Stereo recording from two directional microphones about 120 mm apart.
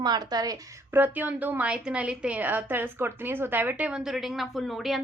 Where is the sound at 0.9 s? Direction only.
15° right (ahead or behind).